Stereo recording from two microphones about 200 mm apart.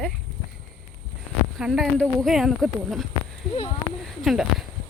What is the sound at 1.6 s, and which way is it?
Speech, centre (ahead or behind).